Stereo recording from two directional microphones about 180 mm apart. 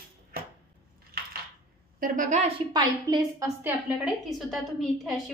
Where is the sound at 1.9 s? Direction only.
50° right (ahead or behind).